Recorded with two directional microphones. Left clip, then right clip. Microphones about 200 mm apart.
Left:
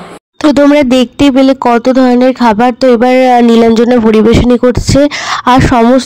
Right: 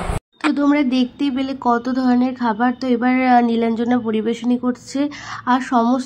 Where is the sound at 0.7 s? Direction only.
50° left (ahead or behind).